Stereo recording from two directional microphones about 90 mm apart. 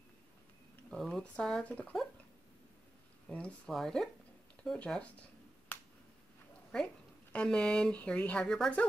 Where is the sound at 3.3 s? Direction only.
15° left (ahead or behind).